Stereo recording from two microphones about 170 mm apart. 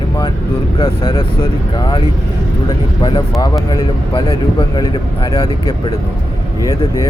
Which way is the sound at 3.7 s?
25° left (ahead or behind).